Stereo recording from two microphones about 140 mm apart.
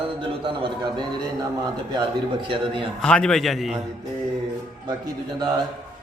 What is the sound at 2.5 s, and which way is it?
Speech, 40° right (ahead or behind).